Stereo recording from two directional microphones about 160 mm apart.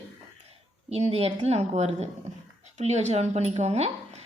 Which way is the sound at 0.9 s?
40° right (ahead or behind).